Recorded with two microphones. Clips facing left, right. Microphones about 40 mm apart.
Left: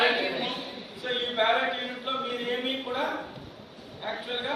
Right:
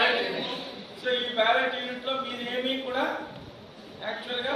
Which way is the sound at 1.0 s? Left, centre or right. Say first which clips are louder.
Right 1 dB; right.